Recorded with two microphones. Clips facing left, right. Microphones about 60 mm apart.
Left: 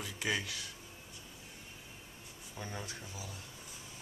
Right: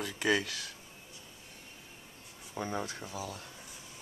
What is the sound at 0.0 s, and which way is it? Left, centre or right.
Speech, right.